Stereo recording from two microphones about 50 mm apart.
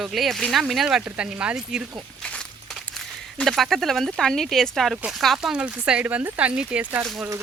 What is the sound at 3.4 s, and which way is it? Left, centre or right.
Speech, centre.